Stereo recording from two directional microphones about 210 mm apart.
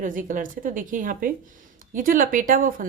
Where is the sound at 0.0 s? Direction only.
40° right (ahead or behind).